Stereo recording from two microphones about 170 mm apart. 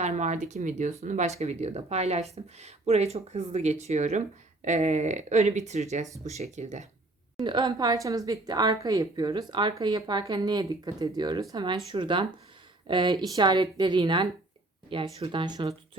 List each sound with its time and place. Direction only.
0.0 s speech: 45° right (ahead or behind)
7.3 s a woman's voice: 25° right (ahead or behind)